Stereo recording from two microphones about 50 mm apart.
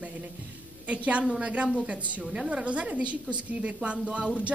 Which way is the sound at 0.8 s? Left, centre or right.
Right.